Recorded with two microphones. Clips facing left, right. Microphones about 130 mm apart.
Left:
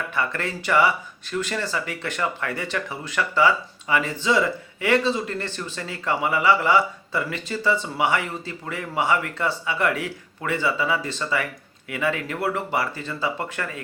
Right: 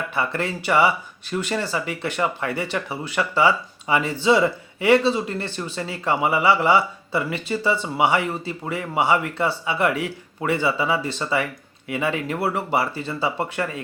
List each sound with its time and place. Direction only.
0.1 s speech: 20° right (ahead or behind)